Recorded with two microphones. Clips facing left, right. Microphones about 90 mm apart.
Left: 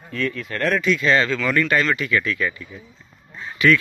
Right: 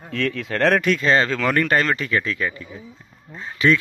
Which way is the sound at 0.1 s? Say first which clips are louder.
Right 2 dB; 90° right.